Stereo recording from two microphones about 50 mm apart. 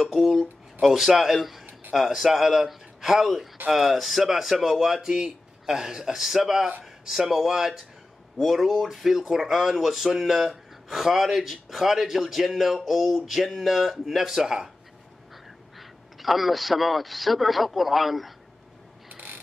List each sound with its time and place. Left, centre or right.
0.0 s speech: centre
15.8 s speech: centre
19.0 s mechanisms: right